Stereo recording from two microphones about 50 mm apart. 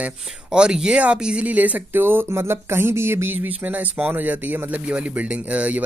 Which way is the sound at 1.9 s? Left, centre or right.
Right.